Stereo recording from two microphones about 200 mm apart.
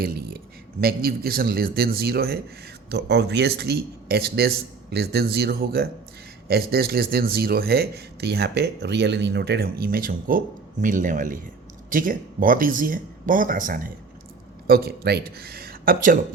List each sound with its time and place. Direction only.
0.0 s speech: 50° right (ahead or behind)